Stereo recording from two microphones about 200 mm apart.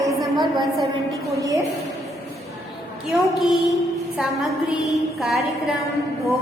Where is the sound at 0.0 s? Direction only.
15° right (ahead or behind).